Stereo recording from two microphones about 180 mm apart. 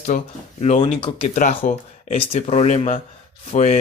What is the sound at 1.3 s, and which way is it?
Speech, 45° left (ahead or behind).